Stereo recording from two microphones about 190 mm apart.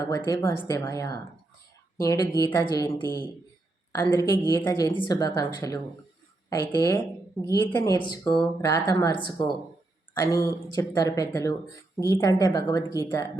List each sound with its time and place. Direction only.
0.0 s speech: 15° left (ahead or behind)
2.3 s speech: 15° left (ahead or behind)